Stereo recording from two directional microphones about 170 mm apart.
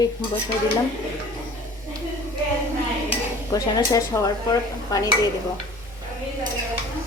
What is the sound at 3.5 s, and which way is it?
Speech, 20° left (ahead or behind).